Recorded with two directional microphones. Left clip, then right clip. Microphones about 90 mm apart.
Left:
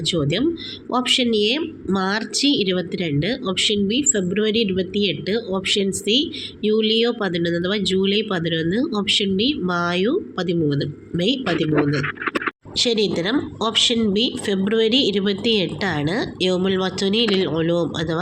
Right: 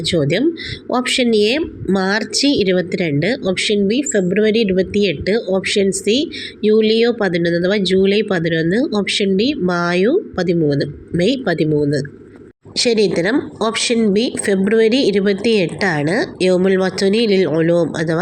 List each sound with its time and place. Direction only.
0.0 s speech: 35° right (ahead or behind)
12.7 s speech: 35° right (ahead or behind)